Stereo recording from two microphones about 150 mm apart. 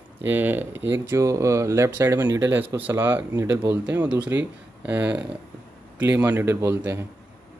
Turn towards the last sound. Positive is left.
turn(degrees=-15)  # may be behind; listen again after turning